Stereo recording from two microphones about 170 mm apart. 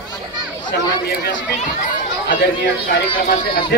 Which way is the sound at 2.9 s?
65° left (ahead or behind).